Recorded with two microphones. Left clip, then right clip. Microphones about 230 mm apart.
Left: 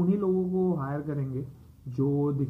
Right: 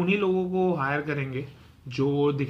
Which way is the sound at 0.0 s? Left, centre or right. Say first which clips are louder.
Right 3 dB; right.